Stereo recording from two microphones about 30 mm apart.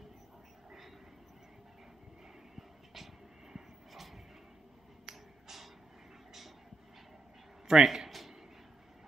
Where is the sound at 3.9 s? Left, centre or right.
Centre.